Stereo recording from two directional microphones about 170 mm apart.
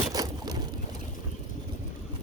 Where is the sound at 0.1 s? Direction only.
20° right (ahead or behind).